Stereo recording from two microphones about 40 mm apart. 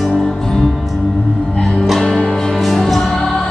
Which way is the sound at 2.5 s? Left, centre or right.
Centre.